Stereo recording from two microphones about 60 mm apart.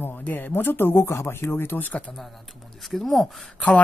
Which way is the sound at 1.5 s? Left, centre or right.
Left.